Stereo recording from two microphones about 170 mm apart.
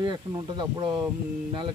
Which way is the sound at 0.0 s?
25° right (ahead or behind).